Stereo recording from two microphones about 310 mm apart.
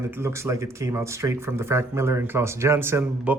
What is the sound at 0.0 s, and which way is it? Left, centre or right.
Speech, centre.